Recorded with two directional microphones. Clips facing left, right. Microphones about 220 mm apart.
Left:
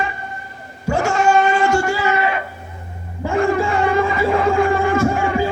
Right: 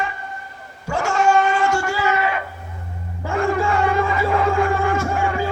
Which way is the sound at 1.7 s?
5° right (ahead or behind).